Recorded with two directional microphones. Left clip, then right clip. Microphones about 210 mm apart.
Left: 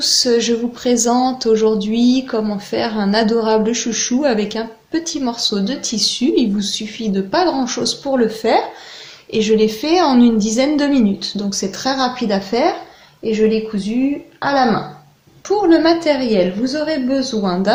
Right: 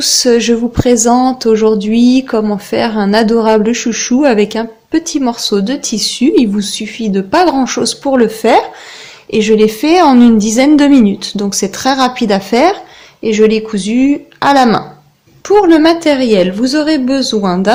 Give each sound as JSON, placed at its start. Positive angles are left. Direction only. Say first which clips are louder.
{"t": 0.0, "sound": "speech", "louder": "right 5 dB", "side_deg": -35}